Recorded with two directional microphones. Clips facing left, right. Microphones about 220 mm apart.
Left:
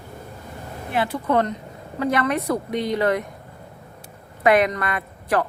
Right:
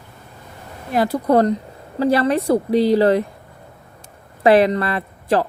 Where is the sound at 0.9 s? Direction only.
40° right (ahead or behind).